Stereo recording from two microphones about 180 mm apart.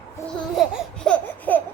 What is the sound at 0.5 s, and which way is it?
Laughter, centre (ahead or behind).